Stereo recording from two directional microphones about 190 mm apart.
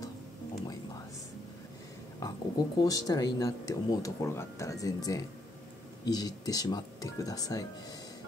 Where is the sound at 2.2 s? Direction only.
20° left (ahead or behind).